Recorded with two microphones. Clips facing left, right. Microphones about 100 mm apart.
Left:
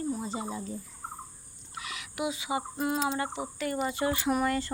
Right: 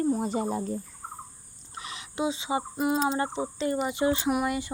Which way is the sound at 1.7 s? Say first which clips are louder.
Right 3 dB; 30° right (ahead or behind).